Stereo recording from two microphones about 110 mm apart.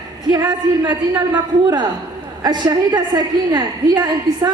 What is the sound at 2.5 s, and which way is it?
A woman's voice, 40° right (ahead or behind).